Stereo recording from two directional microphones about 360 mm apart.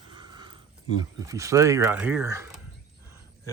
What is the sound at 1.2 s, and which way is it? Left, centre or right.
Speech, centre.